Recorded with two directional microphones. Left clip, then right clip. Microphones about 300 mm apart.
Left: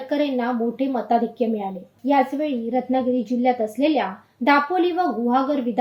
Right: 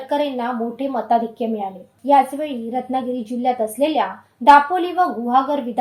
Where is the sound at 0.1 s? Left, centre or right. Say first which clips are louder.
Right 2 dB; centre.